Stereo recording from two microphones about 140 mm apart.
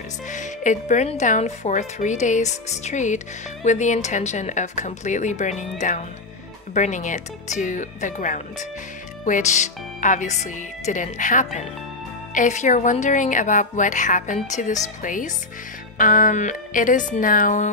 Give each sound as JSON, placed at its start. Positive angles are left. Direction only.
{"t": 0.3, "sound": "a woman's voice", "side_deg": 60}